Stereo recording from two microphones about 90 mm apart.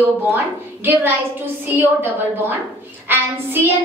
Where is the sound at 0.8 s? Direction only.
25° right (ahead or behind).